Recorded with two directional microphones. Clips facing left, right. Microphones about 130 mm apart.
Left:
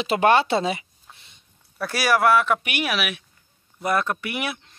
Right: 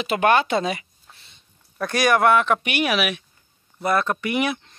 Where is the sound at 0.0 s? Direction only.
25° left (ahead or behind).